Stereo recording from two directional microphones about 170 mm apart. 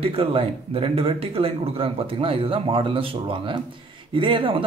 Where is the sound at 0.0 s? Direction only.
35° right (ahead or behind).